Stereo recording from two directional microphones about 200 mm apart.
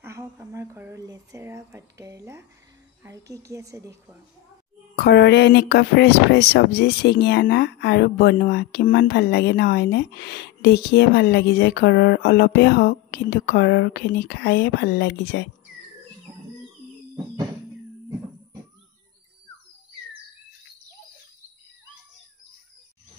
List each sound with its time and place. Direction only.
0.0 s speech: 15° right (ahead or behind)
4.9 s speech: 55° left (ahead or behind)